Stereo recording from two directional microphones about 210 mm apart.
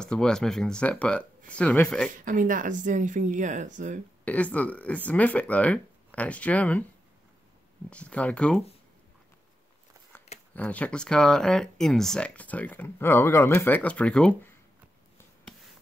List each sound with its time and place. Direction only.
0.0 s speech: 5° left (ahead or behind)
2.0 s speech: 40° right (ahead or behind)
4.2 s speech: 5° left (ahead or behind)
7.9 s speech: 5° left (ahead or behind)
10.5 s speech: 5° left (ahead or behind)